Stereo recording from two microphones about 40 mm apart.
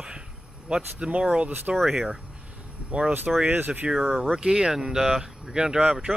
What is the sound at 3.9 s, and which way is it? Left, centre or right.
Speech, centre.